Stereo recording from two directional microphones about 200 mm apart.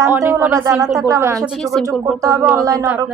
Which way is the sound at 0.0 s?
15° right (ahead or behind).